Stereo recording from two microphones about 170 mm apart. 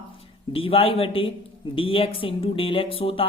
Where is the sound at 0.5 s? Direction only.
30° left (ahead or behind).